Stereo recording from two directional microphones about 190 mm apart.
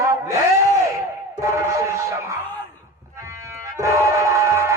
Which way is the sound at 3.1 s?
15° right (ahead or behind).